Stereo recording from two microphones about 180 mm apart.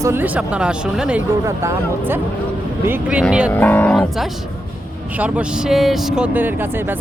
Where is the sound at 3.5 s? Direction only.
10° left (ahead or behind).